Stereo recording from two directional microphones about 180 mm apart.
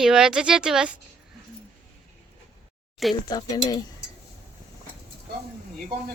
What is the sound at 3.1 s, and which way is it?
Speech, 20° left (ahead or behind).